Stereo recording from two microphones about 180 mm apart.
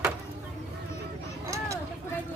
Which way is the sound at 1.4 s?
15° right (ahead or behind).